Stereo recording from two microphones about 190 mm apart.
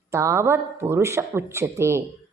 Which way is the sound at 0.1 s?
15° right (ahead or behind).